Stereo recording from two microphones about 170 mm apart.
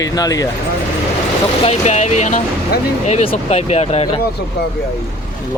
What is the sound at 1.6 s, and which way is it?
Speech, 40° left (ahead or behind).